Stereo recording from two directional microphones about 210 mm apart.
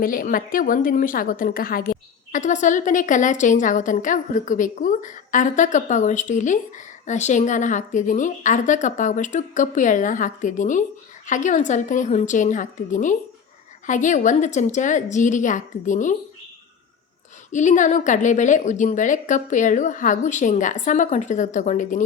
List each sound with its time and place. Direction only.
0.0 s a woman's voice: 40° left (ahead or behind)
17.5 s a woman's voice: 35° left (ahead or behind)